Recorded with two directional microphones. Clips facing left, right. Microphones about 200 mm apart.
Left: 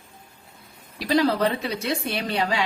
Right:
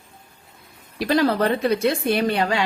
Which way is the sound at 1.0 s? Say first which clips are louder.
Right 2 dB; 55° right (ahead or behind).